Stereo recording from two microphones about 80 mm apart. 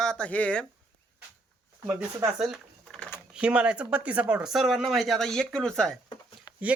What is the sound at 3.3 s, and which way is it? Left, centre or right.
Speech, centre.